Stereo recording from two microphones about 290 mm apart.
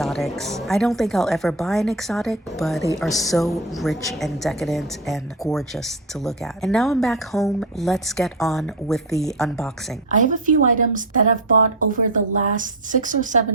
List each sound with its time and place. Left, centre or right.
0.0 s speech: centre
10.1 s a woman's voice: right